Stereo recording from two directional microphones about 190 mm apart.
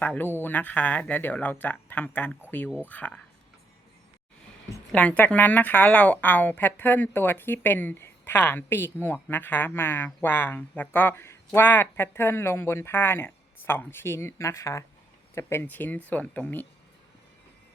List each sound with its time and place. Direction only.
0.0 s a woman's voice: 10° left (ahead or behind)
4.9 s a woman's voice: 5° left (ahead or behind)